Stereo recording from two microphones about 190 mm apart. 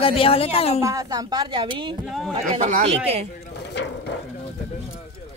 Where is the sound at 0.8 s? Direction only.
20° right (ahead or behind).